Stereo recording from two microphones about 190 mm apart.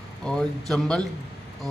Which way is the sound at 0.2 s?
5° left (ahead or behind).